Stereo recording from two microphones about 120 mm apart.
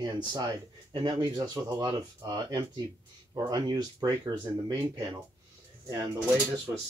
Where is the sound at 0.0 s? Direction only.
40° right (ahead or behind).